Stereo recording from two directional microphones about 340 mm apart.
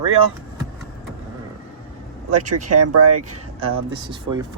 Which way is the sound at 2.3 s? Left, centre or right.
Right.